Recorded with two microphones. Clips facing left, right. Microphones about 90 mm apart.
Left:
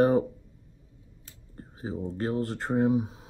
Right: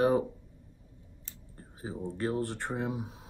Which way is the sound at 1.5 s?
35° left (ahead or behind).